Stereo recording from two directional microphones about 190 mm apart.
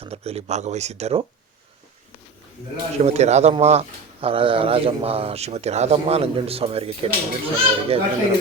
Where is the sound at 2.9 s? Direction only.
35° right (ahead or behind).